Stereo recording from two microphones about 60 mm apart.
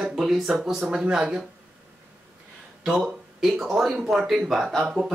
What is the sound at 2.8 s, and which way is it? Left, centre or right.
Speech, centre.